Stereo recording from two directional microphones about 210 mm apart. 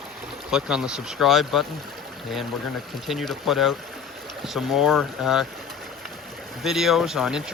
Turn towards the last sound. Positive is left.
turn(degrees=0)  # may be behind; listen again after turning